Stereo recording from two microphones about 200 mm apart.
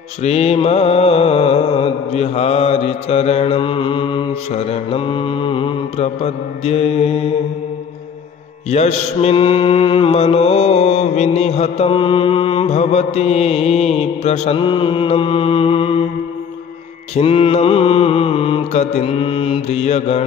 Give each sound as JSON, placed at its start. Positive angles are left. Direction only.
{"t": 0.2, "sound": "mantra", "side_deg": 30}
{"t": 8.6, "sound": "mantra", "side_deg": 35}
{"t": 17.1, "sound": "mantra", "side_deg": 30}